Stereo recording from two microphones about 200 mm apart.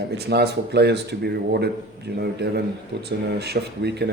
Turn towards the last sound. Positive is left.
turn(degrees=-55)  # may be behind; listen again after turning